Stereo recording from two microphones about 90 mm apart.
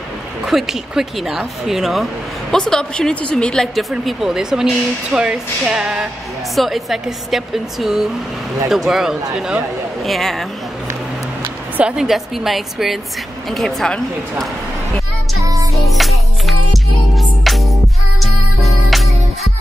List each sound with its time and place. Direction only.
0.5 s speech: 5° right (ahead or behind)
11.7 s speech: 10° right (ahead or behind); by 14.0 s 5° left (ahead or behind)
15.4 s music: 40° right (ahead or behind)
15.7 s music: centre (ahead or behind)